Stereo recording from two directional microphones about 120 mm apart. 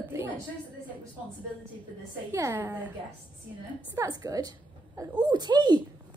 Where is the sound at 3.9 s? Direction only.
30° right (ahead or behind).